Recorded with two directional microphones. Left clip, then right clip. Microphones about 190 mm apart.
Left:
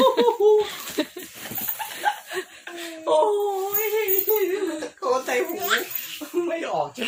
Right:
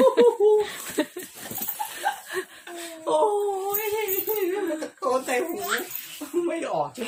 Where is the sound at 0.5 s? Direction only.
10° right (ahead or behind).